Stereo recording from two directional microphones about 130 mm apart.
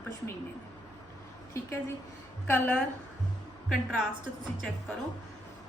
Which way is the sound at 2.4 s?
10° left (ahead or behind).